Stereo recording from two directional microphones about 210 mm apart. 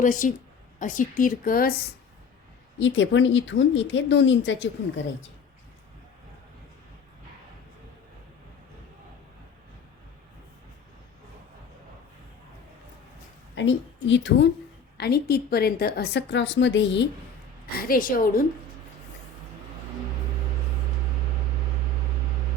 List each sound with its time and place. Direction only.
0.0 s a woman's voice: 40° left (ahead or behind)
2.7 s a woman's voice: 60° left (ahead or behind)
13.6 s a woman's voice: 60° left (ahead or behind)
17.7 s a woman's voice: 45° left (ahead or behind)